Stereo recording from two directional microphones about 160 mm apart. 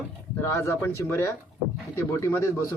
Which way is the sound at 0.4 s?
15° left (ahead or behind).